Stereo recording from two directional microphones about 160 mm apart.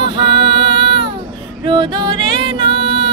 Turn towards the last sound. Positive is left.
turn(degrees=-30)  # may be behind; listen again after turning